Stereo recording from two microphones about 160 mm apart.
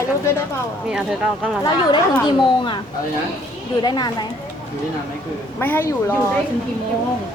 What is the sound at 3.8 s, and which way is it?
Speech, 25° left (ahead or behind).